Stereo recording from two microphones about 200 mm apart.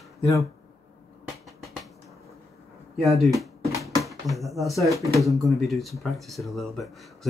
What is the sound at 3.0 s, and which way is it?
Speech, centre (ahead or behind).